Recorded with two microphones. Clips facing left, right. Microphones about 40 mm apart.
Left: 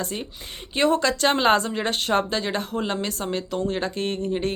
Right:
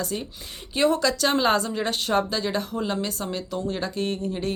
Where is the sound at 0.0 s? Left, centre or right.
Left.